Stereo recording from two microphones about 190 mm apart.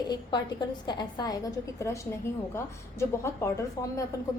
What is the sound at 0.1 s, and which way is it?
A woman's voice, 25° left (ahead or behind).